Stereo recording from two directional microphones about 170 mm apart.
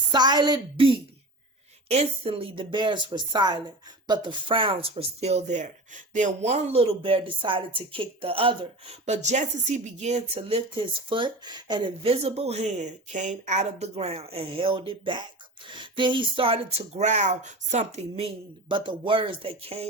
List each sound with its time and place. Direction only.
0.1 s speech: 25° right (ahead or behind); by 18.3 s 40° right (ahead or behind)
18.7 s speech: 30° right (ahead or behind)